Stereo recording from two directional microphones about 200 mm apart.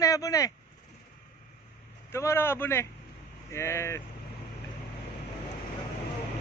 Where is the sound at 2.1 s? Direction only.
15° left (ahead or behind).